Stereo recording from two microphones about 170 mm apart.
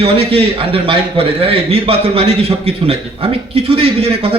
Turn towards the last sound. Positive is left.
turn(degrees=-35)  # may be behind; listen again after turning